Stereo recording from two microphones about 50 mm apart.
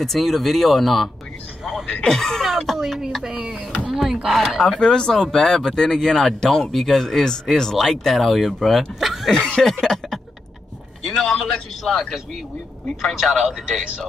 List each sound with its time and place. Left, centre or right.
0.0 s speech: centre
1.6 s music: centre
2.0 s speech: centre
3.3 s speech: centre
4.6 s speech: centre
9.3 s speech: centre
9.7 s a sound: centre
11.1 s speech: centre